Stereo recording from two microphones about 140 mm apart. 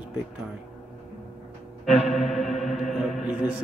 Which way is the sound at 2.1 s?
Centre (ahead or behind).